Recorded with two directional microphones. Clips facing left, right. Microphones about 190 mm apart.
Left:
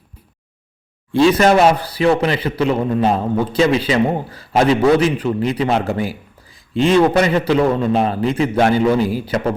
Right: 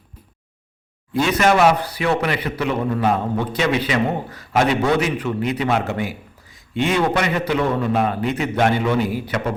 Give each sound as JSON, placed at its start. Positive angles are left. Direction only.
{"t": 1.1, "sound": "a man's voice", "side_deg": 30}